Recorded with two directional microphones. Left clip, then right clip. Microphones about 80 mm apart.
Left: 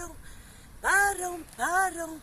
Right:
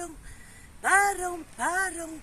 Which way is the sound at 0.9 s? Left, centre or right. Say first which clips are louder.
Right 2 dB; right.